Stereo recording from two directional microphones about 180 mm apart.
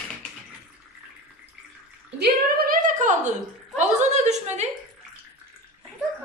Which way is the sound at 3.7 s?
40° right (ahead or behind).